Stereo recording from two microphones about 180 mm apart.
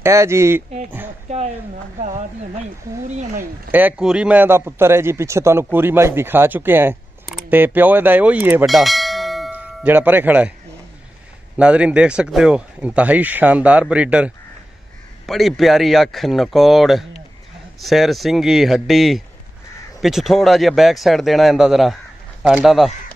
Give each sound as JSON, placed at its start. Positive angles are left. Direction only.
{"t": 0.0, "sound": "a man's voice", "side_deg": -15}
{"t": 2.0, "sound": "speech", "side_deg": -40}
{"t": 3.7, "sound": "a man's voice", "side_deg": -5}
{"t": 8.6, "sound": "bell", "side_deg": 0}
{"t": 11.5, "sound": "a man's voice", "side_deg": -5}